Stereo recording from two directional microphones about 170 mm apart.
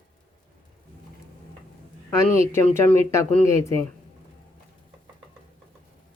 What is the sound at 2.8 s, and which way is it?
Speech, 15° left (ahead or behind).